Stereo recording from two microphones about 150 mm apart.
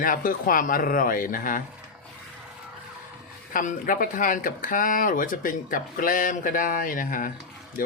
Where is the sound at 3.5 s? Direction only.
65° left (ahead or behind).